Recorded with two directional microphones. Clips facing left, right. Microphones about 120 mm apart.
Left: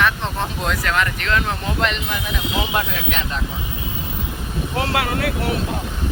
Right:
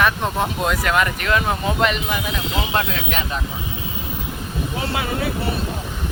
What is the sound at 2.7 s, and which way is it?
Speech, 5° left (ahead or behind).